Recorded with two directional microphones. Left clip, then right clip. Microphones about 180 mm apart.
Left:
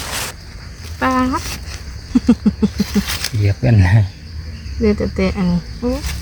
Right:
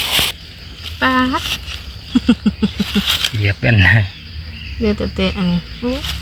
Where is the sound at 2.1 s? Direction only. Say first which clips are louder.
Even; 10° left (ahead or behind).